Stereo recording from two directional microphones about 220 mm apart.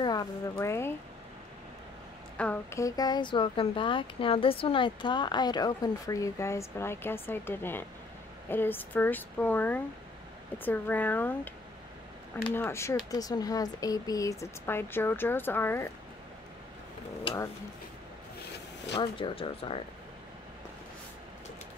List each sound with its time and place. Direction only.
0.0 s speech: 15° left (ahead or behind)
2.3 s speech: 5° left (ahead or behind)
12.5 s speech: 10° left (ahead or behind)
17.2 s a sound: 15° left (ahead or behind)
18.9 s speech: 25° left (ahead or behind)